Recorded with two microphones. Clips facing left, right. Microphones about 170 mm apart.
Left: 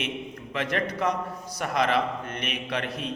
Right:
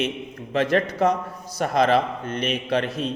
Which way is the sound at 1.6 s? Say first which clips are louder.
Right 5 dB; 30° right (ahead or behind).